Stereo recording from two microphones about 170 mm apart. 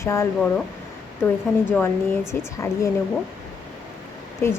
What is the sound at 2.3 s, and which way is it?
Speech, 15° left (ahead or behind).